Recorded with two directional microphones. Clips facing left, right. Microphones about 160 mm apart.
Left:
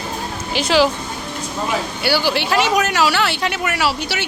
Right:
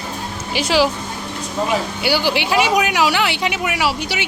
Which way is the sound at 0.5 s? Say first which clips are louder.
Left 1 dB; 10° right (ahead or behind).